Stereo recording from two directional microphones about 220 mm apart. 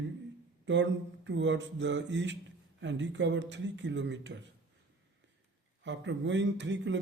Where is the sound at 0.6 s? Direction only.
55° right (ahead or behind).